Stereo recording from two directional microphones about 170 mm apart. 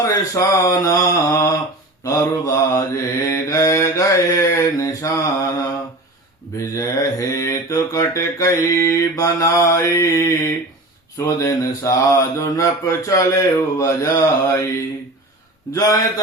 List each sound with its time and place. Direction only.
0.1 s mantra: 15° left (ahead or behind)
6.6 s mantra: 20° left (ahead or behind)
15.7 s mantra: 20° left (ahead or behind)